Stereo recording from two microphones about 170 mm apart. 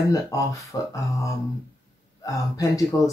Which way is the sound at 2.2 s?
20° left (ahead or behind).